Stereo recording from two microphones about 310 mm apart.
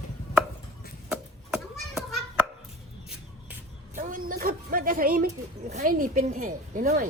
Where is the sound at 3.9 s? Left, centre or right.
Right.